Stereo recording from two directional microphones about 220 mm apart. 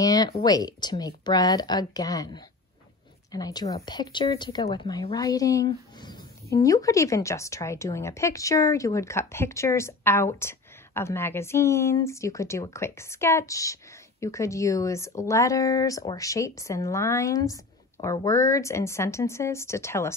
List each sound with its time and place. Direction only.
0.0 s speech: 15° left (ahead or behind)